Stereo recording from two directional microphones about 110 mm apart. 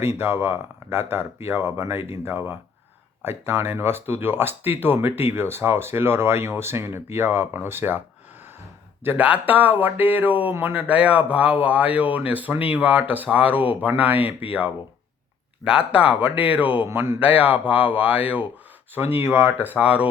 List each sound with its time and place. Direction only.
0.0 s speech: 20° right (ahead or behind)
9.0 s speech: 15° right (ahead or behind)
15.6 s speech: 10° right (ahead or behind)